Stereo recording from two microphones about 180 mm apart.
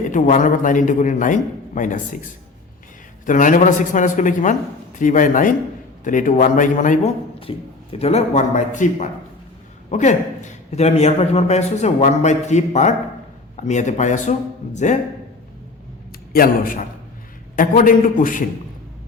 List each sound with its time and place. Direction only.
0.1 s a man's voice: 45° left (ahead or behind)
3.2 s a man's voice: 45° left (ahead or behind)
7.3 s a man's voice: 30° left (ahead or behind)
16.3 s a man's voice: 50° left (ahead or behind)